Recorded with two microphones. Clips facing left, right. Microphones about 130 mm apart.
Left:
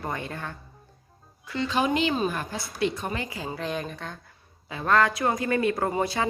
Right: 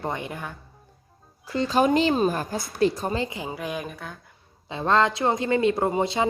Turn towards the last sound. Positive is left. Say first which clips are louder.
# right 3 dB
turn(degrees=-20)  # may be behind; listen again after turning